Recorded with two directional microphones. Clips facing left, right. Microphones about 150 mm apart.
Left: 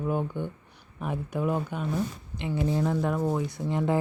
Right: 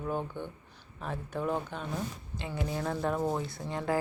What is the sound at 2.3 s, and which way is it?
Speech, 25° left (ahead or behind).